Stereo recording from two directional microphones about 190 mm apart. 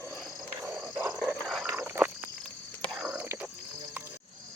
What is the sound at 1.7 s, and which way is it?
Frog, 10° right (ahead or behind).